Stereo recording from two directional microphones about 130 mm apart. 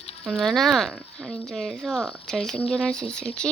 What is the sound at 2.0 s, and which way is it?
Speech, 5° left (ahead or behind).